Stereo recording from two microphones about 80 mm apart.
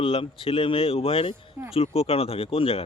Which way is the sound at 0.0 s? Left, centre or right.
Left.